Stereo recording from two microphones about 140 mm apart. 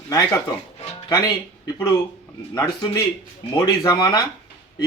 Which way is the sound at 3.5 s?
25° left (ahead or behind).